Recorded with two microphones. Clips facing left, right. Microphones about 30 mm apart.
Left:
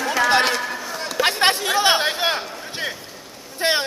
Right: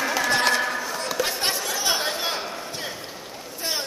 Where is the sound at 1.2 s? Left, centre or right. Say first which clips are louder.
Left 10 dB; left.